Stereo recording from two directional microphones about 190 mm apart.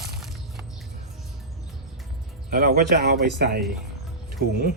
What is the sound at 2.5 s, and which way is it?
Speech, 55° right (ahead or behind).